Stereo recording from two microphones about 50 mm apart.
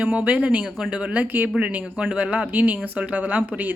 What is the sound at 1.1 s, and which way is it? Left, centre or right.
Speech, right.